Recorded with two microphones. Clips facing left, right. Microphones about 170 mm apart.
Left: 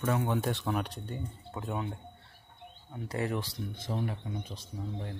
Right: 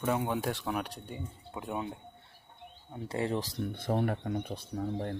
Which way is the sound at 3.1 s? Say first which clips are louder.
Right 1 dB; 25° right (ahead or behind).